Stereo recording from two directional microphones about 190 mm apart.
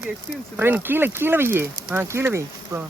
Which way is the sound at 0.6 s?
10° right (ahead or behind).